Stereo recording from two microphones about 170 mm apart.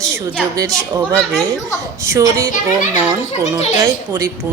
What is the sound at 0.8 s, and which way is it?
A child's voice, 15° right (ahead or behind).